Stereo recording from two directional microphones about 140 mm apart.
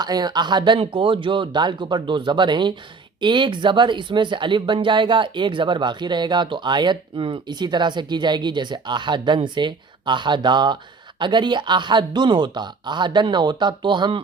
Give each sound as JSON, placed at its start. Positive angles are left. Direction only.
{"t": 0.0, "sound": "speech", "side_deg": -30}